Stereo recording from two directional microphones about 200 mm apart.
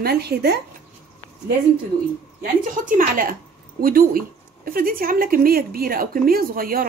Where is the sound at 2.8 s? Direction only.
45° right (ahead or behind).